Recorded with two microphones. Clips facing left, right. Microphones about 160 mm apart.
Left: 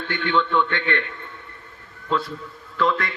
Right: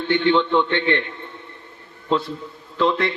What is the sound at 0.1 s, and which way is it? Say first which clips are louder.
Speech: right 5 dB; 25° right (ahead or behind).